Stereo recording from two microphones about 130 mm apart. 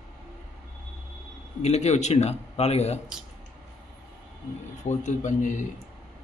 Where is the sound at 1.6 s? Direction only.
60° left (ahead or behind).